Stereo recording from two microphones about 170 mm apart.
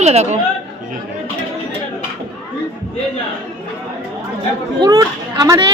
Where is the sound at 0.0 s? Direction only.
40° right (ahead or behind).